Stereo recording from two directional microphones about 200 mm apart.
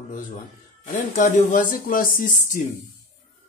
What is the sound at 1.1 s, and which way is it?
Speech, 40° left (ahead or behind).